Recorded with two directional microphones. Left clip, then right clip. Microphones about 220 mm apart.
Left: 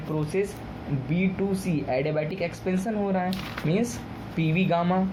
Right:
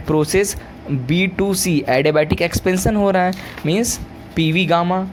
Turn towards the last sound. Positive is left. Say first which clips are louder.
# right 8 dB
turn(degrees=-30)  # may be behind; listen again after turning